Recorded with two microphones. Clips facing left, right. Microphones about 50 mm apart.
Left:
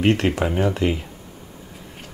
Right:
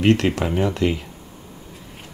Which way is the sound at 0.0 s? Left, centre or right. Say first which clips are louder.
Right 1 dB; centre.